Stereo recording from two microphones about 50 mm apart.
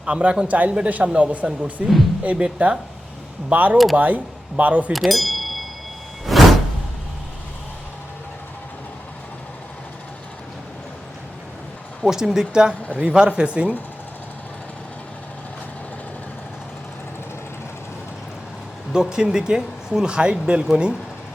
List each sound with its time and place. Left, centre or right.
0.0 s a man's voice: right
1.8 s speech: centre
2.2 s a man's voice: right
4.9 s a sound: centre
12.0 s speech: centre
12.9 s a man's voice: right
18.9 s a man's voice: centre